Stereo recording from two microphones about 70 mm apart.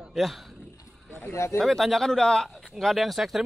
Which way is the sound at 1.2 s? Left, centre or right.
Left.